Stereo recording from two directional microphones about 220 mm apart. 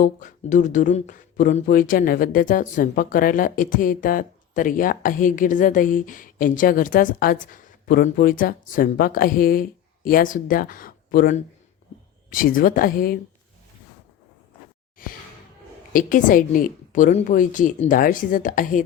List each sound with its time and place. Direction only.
0.0 s speech: 35° left (ahead or behind)
15.9 s speech: 40° left (ahead or behind)